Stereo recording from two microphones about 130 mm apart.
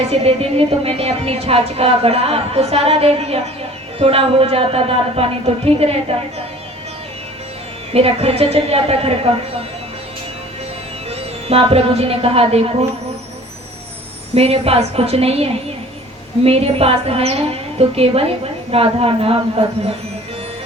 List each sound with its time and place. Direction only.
0.0 s a woman's voice: 55° right (ahead or behind)
7.9 s a woman's voice: 50° right (ahead or behind)
11.4 s a woman's voice: 50° right (ahead or behind)
14.3 s a woman's voice: 50° right (ahead or behind)